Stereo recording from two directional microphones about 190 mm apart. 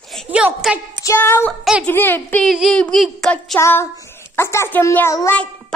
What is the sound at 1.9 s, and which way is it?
Speech, 10° left (ahead or behind).